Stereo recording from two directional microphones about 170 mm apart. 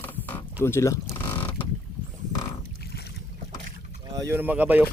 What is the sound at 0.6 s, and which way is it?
Speech, 15° left (ahead or behind).